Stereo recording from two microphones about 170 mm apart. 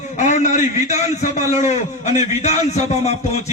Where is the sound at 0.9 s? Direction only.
45° left (ahead or behind).